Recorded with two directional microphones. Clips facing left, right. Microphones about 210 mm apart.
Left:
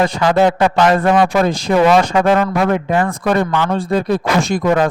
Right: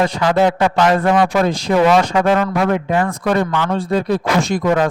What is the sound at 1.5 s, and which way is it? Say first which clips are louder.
A man's voice: left 1 dB; 50° left (ahead or behind).